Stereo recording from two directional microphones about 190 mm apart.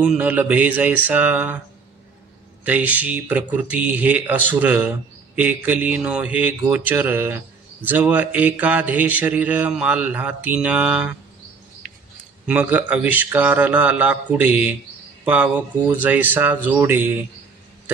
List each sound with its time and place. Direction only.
0.0 s speech: 5° right (ahead or behind)
2.6 s speech: 10° right (ahead or behind)
11.8 s a sound: 45° right (ahead or behind)
12.4 s speech: 10° right (ahead or behind)